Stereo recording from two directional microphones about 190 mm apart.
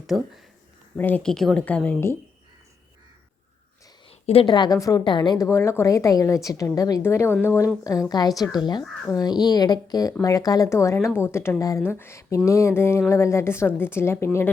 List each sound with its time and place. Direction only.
0.1 s speech: centre (ahead or behind)
0.9 s a woman's voice: 10° left (ahead or behind)
4.1 s a woman's voice: 30° left (ahead or behind)
8.8 s speech: centre (ahead or behind)
9.2 s a woman's voice: 20° left (ahead or behind)